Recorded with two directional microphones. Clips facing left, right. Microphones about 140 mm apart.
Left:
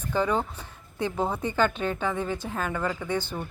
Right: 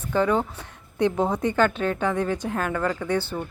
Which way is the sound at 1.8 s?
10° left (ahead or behind).